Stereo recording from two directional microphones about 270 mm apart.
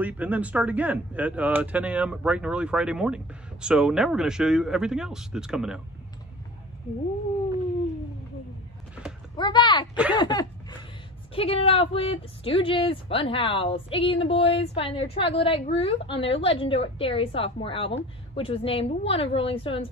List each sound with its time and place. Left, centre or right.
0.0 s speech: centre
9.4 s speech: centre
10.1 s a sound: centre
11.3 s a woman's voice: left